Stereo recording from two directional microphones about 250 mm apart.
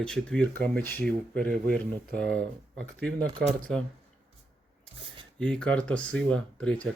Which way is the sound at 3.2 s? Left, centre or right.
Centre.